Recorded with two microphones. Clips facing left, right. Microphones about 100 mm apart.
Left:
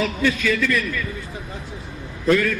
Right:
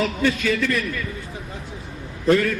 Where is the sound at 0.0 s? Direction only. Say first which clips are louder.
Even; 40° right (ahead or behind).